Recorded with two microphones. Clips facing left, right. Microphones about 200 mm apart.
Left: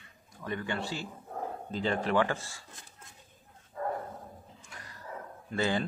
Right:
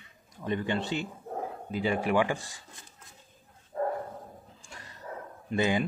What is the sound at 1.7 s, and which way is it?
Speech, 10° right (ahead or behind).